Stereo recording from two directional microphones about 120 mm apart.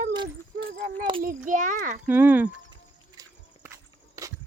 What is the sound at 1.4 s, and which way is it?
Speech, 90° right.